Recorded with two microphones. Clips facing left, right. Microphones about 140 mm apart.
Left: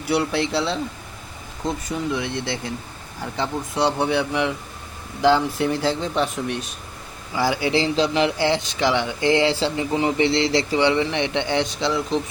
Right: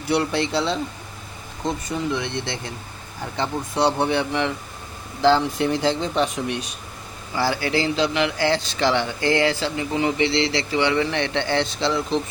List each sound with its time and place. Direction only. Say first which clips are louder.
0.0 s speech: even; 5° left (ahead or behind)
7.3 s a man's voice: left 1 dB; 15° left (ahead or behind); by 10.9 s 35° left (ahead or behind)
10.9 s speech: even; 20° left (ahead or behind)